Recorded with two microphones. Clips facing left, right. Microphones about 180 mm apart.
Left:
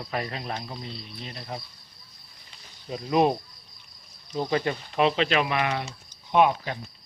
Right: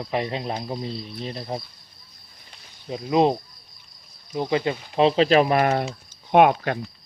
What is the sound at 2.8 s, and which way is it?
Speech, 20° right (ahead or behind).